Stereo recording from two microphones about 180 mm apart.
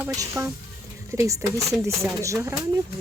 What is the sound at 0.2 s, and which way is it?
Speech, 15° right (ahead or behind).